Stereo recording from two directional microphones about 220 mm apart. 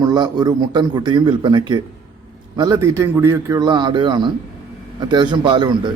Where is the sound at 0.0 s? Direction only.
20° right (ahead or behind).